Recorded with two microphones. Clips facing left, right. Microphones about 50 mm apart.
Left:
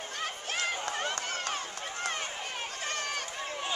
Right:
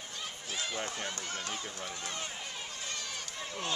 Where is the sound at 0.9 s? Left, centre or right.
Left.